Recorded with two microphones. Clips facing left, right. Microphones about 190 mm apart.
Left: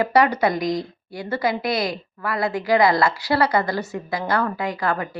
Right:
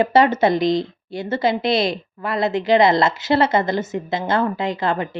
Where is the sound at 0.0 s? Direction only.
25° right (ahead or behind).